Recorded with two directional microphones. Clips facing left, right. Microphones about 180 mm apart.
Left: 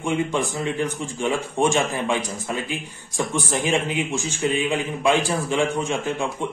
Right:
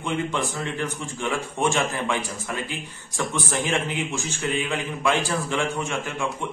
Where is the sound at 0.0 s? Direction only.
15° left (ahead or behind).